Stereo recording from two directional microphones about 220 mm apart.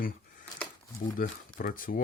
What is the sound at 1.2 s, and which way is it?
Speech, 40° left (ahead or behind).